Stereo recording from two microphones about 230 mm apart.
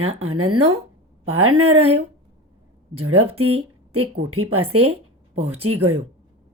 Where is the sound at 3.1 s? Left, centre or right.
Right.